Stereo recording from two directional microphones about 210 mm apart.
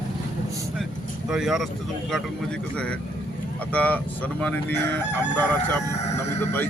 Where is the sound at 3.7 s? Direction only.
5° left (ahead or behind).